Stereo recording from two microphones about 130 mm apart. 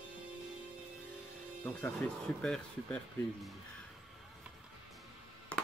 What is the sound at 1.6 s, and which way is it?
Speech, 15° left (ahead or behind).